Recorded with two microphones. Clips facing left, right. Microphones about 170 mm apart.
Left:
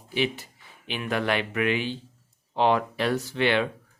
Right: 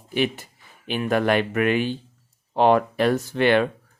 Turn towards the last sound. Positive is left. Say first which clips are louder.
# right 5 dB
turn(degrees=-50)  # may be behind; listen again after turning